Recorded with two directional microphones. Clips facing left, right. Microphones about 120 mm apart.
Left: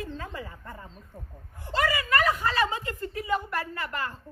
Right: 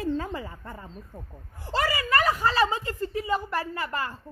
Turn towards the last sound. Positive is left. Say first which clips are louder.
# right 2 dB
turn(degrees=-30)  # may be behind; listen again after turning